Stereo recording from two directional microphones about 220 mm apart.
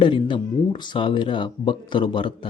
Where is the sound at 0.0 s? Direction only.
20° left (ahead or behind).